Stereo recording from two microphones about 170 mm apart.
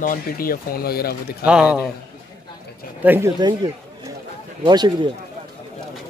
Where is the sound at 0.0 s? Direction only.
55° left (ahead or behind).